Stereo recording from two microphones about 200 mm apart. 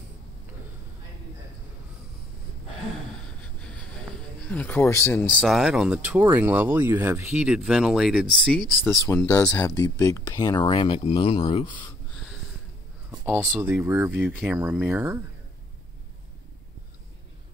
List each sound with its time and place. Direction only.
3.7 s a sound: 5° left (ahead or behind)
5.3 s speech: centre (ahead or behind)
9.7 s speech: 15° left (ahead or behind)
13.2 s speech: 10° right (ahead or behind)